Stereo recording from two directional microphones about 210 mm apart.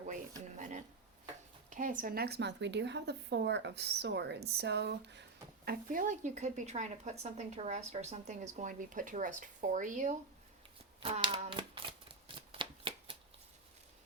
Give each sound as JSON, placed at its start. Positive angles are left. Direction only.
{"t": 0.0, "sound": "a sound", "side_deg": -35}
{"t": 1.7, "sound": "speech", "side_deg": -40}
{"t": 5.6, "sound": "speech", "side_deg": -45}
{"t": 11.0, "sound": "shuffling cards", "side_deg": -25}